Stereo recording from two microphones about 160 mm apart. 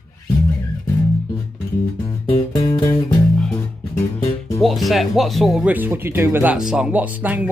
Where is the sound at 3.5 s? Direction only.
15° left (ahead or behind).